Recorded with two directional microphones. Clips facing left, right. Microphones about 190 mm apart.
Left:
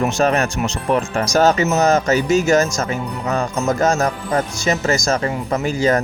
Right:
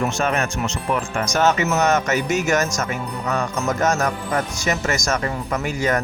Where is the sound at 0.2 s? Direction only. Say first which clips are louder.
Left 5 dB; 35° left (ahead or behind).